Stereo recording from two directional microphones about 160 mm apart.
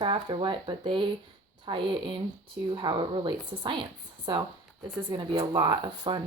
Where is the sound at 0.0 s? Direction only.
30° right (ahead or behind).